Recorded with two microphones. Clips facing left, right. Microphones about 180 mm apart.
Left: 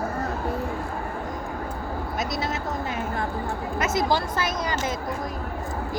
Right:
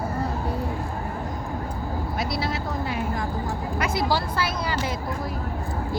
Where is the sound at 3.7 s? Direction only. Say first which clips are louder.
Left 1 dB; 20° left (ahead or behind).